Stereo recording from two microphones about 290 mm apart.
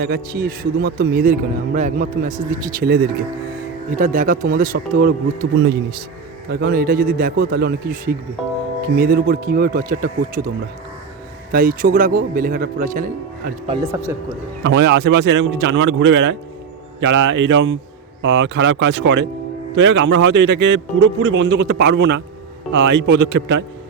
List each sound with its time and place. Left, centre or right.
0.0 s speech: right
11.5 s speech: right
13.7 s speech: centre
14.6 s a man's voice: right